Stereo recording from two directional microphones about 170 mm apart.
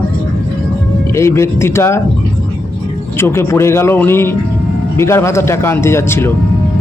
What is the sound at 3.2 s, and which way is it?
Speech, 15° left (ahead or behind).